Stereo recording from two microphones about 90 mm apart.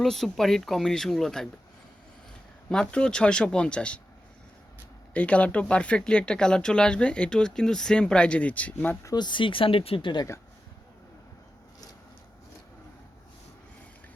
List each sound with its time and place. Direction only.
0.0 s speech: 5° left (ahead or behind)
2.6 s speech: 10° left (ahead or behind)
5.1 s speech: 15° left (ahead or behind)
9.1 s speech: 60° left (ahead or behind)